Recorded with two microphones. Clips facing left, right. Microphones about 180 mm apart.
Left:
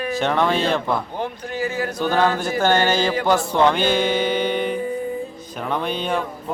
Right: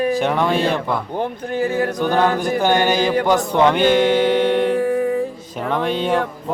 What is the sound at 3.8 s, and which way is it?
Mantra, 70° right (ahead or behind).